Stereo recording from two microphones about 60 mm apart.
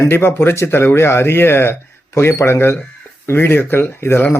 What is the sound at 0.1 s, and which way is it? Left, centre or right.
Speech, left.